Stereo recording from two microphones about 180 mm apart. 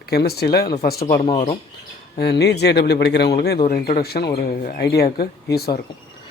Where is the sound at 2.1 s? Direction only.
65° left (ahead or behind).